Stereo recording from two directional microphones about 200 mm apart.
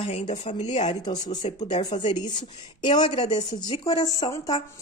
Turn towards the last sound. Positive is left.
turn(degrees=15)  # may be behind; listen again after turning